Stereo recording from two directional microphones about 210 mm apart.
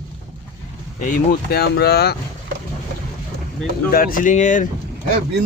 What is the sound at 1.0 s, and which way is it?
Speech, 40° left (ahead or behind).